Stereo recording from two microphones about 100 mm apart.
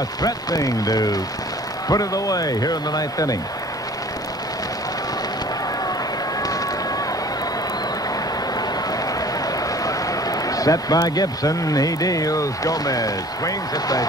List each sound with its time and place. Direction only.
0.2 s speech: 40° left (ahead or behind)
9.6 s speech: 35° left (ahead or behind)